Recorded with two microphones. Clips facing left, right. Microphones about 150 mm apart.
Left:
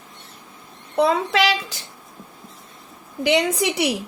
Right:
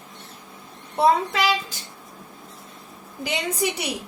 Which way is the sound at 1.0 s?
80° left.